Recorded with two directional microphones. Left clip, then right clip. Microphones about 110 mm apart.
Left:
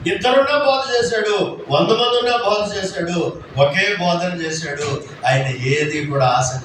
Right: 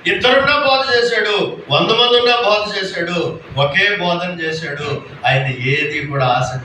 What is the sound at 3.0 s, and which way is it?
A man's voice, 40° left (ahead or behind).